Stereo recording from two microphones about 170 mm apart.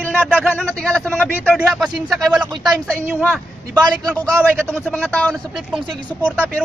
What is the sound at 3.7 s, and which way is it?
Speech, 20° right (ahead or behind).